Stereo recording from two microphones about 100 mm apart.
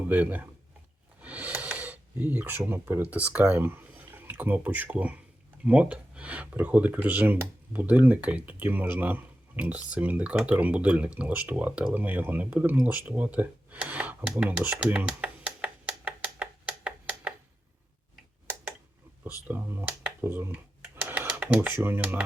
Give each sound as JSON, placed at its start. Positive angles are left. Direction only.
{"t": 0.1, "sound": "speech", "side_deg": -15}
{"t": 19.5, "sound": "speech", "side_deg": -20}
{"t": 20.9, "sound": "computer keyboard", "side_deg": -20}
{"t": 21.8, "sound": "speech", "side_deg": -20}